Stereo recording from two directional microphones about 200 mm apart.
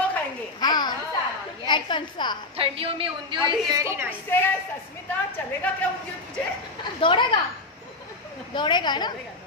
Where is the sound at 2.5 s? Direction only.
25° right (ahead or behind).